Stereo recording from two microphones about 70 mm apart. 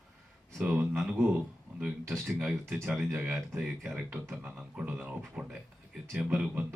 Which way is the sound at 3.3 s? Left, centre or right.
Centre.